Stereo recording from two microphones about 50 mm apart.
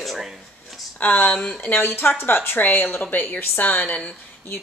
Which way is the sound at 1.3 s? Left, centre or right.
Centre.